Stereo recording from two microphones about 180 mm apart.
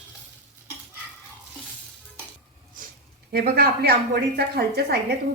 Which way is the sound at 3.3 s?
55° right (ahead or behind).